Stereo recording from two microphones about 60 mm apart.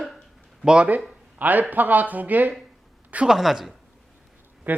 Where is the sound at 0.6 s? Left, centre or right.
Centre.